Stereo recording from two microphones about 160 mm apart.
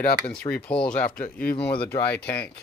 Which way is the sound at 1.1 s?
65° left (ahead or behind).